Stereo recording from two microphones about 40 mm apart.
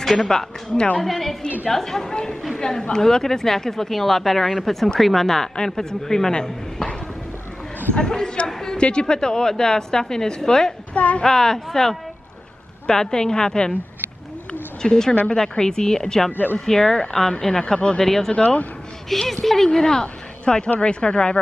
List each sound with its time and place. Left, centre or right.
0.0 s a woman's voice: centre
7.9 s a woman's voice: centre
10.9 s speech: left
11.2 s a woman's voice: centre
14.8 s a woman's voice: centre
16.3 s speech: left
16.6 s a woman's voice: centre
18.3 s speech: left
19.0 s a woman's voice: centre; by 21.4 s left